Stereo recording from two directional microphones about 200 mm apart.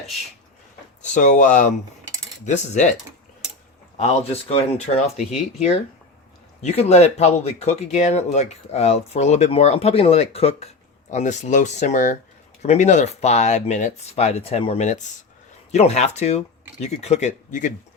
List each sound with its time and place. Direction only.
1.1 s speech: 40° left (ahead or behind)
3.9 s speech: 30° left (ahead or behind)
6.6 s speech: 35° left (ahead or behind)